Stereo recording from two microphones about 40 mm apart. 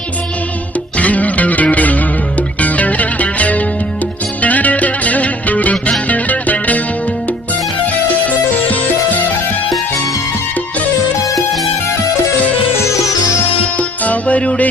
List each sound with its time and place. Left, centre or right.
0.9 s music: left
13.7 s music: left